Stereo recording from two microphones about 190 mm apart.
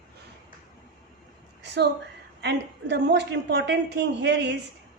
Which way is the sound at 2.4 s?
65° right (ahead or behind).